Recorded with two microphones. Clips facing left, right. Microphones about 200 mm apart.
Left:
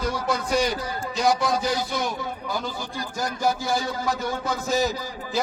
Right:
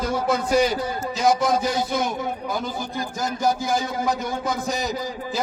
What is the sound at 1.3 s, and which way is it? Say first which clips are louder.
Speech: right 3 dB; 20° right (ahead or behind).